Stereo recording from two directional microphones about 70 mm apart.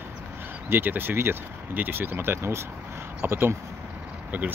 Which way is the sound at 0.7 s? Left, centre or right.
Right.